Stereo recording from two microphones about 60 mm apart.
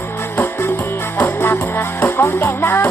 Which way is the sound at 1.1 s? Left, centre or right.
Left.